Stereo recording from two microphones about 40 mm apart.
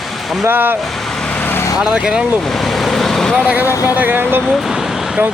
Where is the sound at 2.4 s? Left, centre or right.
Centre.